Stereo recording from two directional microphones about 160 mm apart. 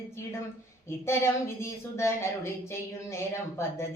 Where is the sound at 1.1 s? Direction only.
15° left (ahead or behind).